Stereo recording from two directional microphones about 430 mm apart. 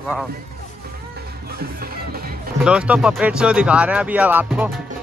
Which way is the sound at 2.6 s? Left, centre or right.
Centre.